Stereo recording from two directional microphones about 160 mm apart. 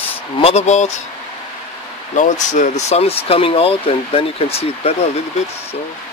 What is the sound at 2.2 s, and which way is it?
Speech, 50° left (ahead or behind).